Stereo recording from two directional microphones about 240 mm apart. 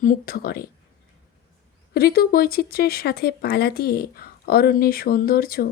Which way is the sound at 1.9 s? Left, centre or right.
Left.